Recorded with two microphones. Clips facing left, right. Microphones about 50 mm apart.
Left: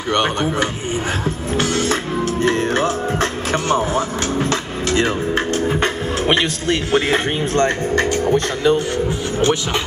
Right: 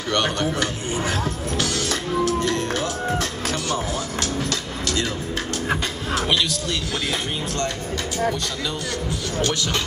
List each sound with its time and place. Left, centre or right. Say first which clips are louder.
0.1 s speech: left 4 dB; left
1.2 s music: left 5 dB; left
5.8 s speech: left 6 dB; left